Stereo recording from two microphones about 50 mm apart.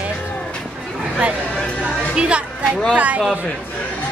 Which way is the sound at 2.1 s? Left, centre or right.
Right.